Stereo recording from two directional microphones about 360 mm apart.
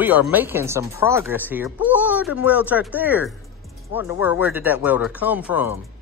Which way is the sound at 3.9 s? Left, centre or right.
Left.